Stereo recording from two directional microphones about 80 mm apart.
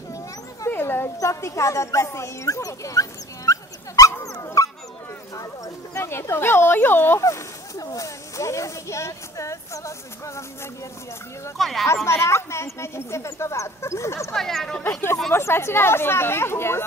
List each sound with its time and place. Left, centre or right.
0.7 s dog: left
1.1 s speech: left
5.9 s speech: left
7.2 s speech: left
11.5 s speech: centre
11.8 s speech: left
14.3 s speech: centre
15.3 s speech: left